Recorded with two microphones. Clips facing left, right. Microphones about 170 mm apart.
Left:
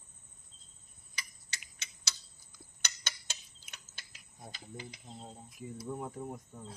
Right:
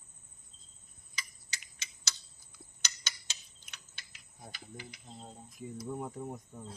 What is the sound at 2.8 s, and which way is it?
Tick-tock, 55° left (ahead or behind).